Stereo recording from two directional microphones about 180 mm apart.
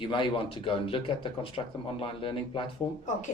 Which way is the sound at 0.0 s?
25° left (ahead or behind).